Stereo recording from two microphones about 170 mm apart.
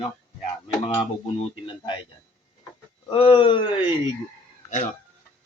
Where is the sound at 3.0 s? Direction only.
30° left (ahead or behind).